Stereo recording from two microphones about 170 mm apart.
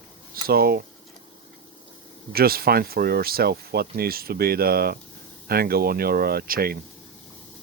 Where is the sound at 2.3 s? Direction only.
65° right (ahead or behind).